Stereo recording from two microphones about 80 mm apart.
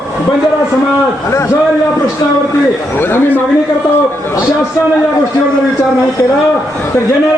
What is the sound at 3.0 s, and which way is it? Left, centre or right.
Speech, left.